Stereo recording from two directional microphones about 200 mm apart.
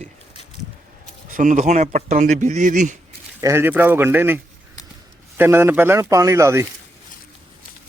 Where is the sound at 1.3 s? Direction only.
40° right (ahead or behind).